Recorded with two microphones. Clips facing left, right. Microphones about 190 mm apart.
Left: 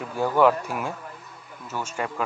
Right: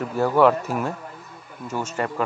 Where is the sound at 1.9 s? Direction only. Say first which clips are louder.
Right 3 dB; 5° left (ahead or behind).